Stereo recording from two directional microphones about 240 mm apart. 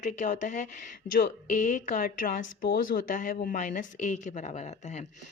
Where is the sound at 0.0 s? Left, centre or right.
Left.